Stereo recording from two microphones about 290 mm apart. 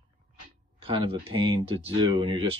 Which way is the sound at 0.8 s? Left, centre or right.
Centre.